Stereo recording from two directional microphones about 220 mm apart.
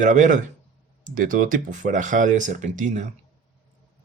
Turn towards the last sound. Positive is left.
turn(degrees=-35)  # may be behind; listen again after turning